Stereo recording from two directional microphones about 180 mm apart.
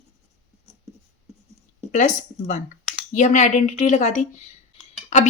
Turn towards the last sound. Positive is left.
turn(degrees=40)  # may be behind; listen again after turning